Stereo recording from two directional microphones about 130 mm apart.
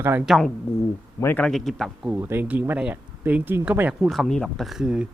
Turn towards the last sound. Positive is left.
turn(degrees=-5)  # may be behind; listen again after turning